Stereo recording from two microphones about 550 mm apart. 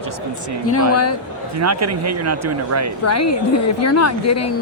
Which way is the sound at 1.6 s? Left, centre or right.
Right.